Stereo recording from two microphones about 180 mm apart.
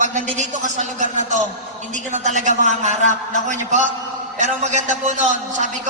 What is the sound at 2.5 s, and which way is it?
Speech, 45° left (ahead or behind).